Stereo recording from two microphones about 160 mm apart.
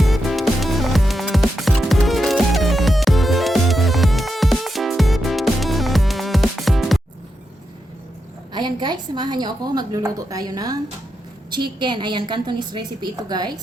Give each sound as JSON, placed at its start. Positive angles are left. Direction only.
{"t": 0.0, "sound": "music", "side_deg": 0}
{"t": 8.5, "sound": "a woman's voice", "side_deg": -25}